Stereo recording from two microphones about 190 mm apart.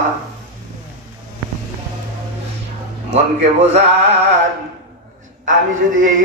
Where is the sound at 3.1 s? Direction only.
35° right (ahead or behind).